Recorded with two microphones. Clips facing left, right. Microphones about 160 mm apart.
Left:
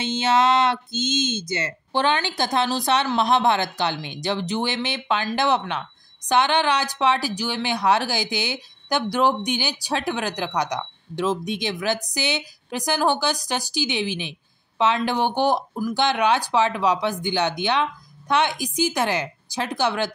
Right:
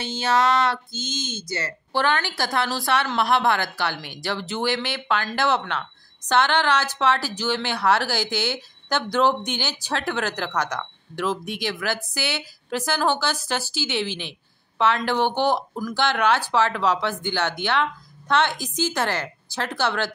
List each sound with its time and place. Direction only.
0.0 s speech: 20° left (ahead or behind)